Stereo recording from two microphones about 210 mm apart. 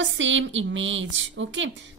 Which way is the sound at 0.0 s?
65° right (ahead or behind).